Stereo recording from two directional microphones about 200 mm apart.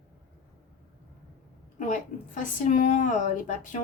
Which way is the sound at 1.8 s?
40° left (ahead or behind).